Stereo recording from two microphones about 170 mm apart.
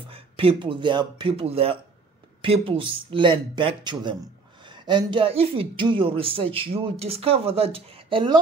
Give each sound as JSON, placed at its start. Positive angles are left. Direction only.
{"t": 0.1, "sound": "speech", "side_deg": -35}